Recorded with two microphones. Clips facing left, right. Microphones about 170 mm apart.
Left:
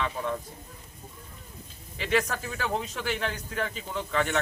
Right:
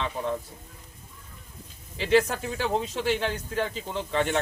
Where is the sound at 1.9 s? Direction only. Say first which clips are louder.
Right 5 dB; 30° right (ahead or behind).